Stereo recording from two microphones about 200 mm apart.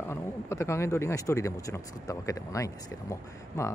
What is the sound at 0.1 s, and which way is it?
Speech, 15° left (ahead or behind).